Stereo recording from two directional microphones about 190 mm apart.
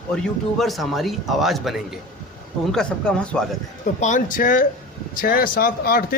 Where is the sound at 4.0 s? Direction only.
40° left (ahead or behind).